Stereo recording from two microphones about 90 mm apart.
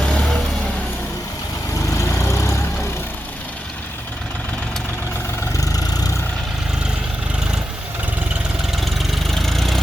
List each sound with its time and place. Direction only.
0.0 s vehicle: 5° left (ahead or behind)
1.9 s vehicle: 35° left (ahead or behind)
5.5 s vehicle: 45° left (ahead or behind)
8.7 s engine: centre (ahead or behind)